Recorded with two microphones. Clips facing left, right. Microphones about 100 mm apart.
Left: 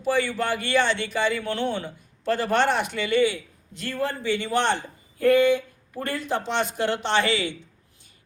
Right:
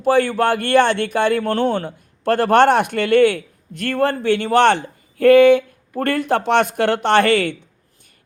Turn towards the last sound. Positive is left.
turn(degrees=-55)  # may be behind; listen again after turning